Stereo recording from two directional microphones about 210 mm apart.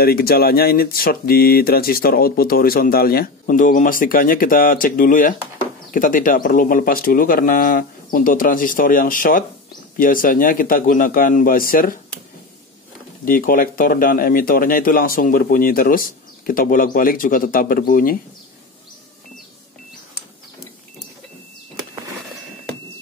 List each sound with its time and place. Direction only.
0.0 s speech: 45° left (ahead or behind)
13.2 s speech: 40° left (ahead or behind)